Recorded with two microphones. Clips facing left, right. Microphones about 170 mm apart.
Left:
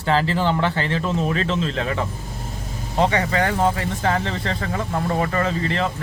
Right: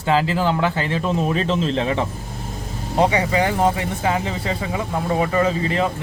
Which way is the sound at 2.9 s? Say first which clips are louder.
Right 2 dB; 15° right (ahead or behind).